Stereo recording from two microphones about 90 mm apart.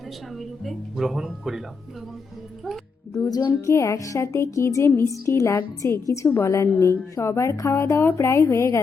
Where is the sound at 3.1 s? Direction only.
45° left (ahead or behind).